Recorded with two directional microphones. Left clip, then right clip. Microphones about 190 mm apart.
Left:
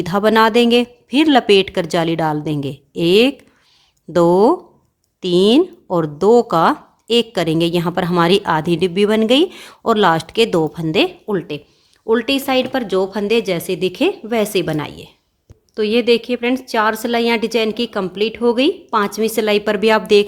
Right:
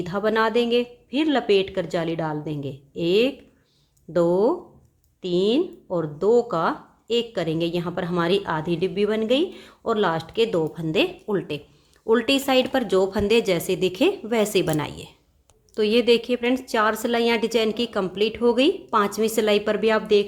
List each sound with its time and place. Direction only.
0.0 s a woman's voice: 40° left (ahead or behind)